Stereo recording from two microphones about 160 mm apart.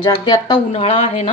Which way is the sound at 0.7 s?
40° left (ahead or behind).